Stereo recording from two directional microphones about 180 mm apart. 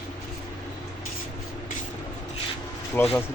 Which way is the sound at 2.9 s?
10° left (ahead or behind).